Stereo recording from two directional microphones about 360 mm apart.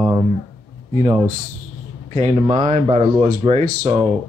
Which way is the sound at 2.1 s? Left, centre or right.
Centre.